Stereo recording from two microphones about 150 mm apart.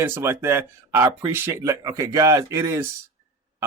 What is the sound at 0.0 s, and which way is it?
A man's voice, 15° right (ahead or behind).